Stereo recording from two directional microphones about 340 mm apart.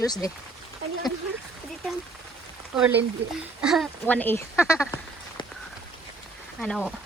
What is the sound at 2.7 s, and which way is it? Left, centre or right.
Speech, centre.